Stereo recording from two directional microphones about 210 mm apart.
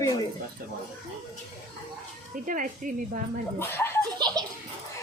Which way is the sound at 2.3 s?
40° right (ahead or behind).